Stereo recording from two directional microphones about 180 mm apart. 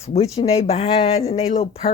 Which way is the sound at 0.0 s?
35° left (ahead or behind).